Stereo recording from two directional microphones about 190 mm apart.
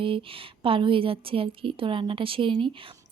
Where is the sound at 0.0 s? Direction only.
30° right (ahead or behind).